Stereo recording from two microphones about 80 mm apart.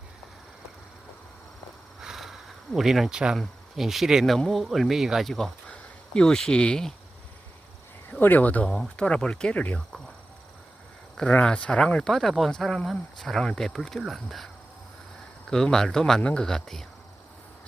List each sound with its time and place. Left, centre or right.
2.0 s a sound: centre
2.7 s speech: centre
5.3 s speech: centre
8.2 s speech: left
11.2 s speech: centre